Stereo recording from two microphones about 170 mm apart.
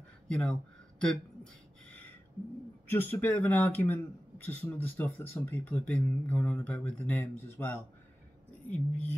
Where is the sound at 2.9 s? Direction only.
10° left (ahead or behind).